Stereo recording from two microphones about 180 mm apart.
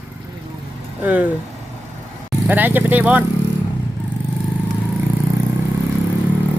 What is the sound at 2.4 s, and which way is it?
Speech, 10° right (ahead or behind).